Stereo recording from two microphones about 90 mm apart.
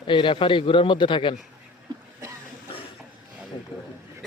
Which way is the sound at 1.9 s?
50° right (ahead or behind).